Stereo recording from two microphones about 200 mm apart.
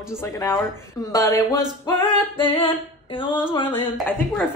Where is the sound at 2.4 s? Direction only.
25° left (ahead or behind).